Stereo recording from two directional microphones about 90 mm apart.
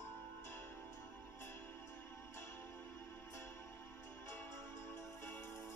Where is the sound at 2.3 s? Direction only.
30° left (ahead or behind).